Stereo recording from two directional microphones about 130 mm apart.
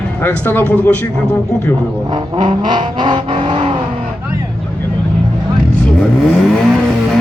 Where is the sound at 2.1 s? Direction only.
45° right (ahead or behind).